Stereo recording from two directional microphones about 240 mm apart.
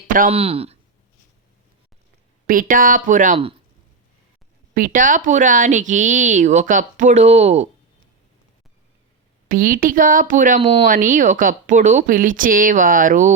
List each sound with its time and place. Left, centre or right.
0.1 s speech: right
2.5 s speech: right
4.7 s speech: right
9.5 s speech: right
10.6 s speech: right
10.8 s speech: right